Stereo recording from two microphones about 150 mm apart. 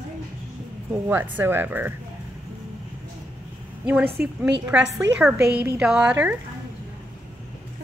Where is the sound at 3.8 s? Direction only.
15° right (ahead or behind).